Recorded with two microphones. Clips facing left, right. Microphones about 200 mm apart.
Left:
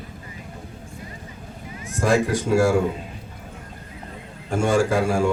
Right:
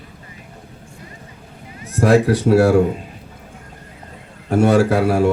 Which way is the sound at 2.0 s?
65° right (ahead or behind).